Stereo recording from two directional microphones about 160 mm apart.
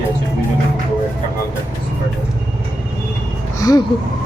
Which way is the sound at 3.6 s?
25° left (ahead or behind).